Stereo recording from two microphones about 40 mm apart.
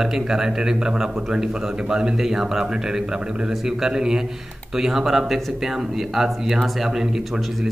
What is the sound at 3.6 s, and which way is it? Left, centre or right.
Speech, centre.